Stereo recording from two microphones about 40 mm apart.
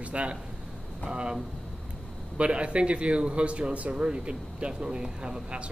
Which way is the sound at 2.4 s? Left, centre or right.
Right.